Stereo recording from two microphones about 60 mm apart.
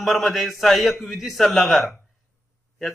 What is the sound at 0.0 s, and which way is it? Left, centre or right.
A man's voice, centre.